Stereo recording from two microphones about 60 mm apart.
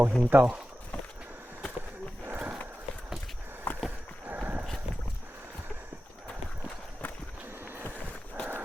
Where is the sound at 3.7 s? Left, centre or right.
Left.